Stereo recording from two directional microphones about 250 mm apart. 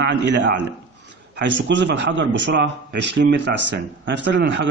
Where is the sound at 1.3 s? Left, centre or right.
Right.